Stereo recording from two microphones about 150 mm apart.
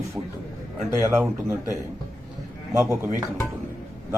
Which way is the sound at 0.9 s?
20° right (ahead or behind).